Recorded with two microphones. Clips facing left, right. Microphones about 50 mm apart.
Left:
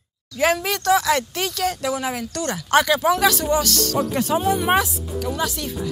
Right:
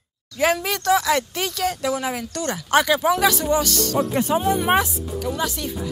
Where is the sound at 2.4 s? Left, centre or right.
Centre.